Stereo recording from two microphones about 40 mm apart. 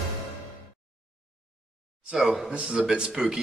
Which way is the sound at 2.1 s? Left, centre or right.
Centre.